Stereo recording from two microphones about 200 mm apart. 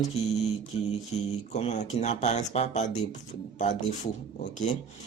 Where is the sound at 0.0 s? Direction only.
35° left (ahead or behind).